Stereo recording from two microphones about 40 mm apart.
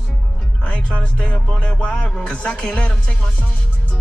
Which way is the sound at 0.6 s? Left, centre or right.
Left.